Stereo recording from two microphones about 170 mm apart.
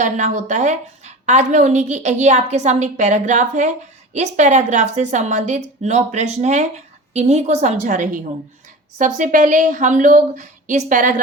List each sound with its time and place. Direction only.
0.0 s a woman's voice: 45° right (ahead or behind)